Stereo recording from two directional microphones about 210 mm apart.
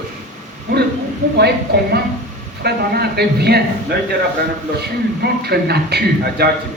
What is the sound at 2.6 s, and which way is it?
A man's voice, 50° right (ahead or behind).